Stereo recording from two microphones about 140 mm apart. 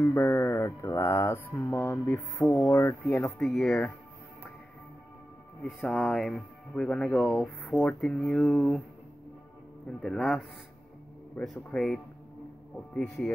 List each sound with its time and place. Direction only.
0.0 s music: 20° left (ahead or behind)
1.7 s speech: 15° left (ahead or behind)
2.7 s music: 25° left (ahead or behind)
3.3 s speech: centre (ahead or behind)
5.6 s speech: centre (ahead or behind)
9.8 s speech: 5° left (ahead or behind)